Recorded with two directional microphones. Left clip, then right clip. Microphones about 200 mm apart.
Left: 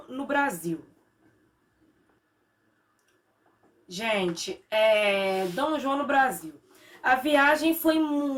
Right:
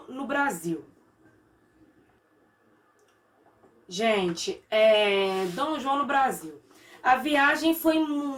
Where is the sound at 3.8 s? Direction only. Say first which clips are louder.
Right 2 dB; 20° left (ahead or behind).